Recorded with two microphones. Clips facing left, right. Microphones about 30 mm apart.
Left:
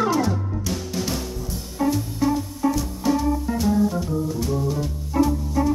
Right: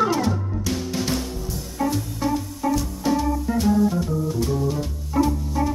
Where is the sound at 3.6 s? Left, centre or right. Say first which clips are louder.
Right 2 dB; centre.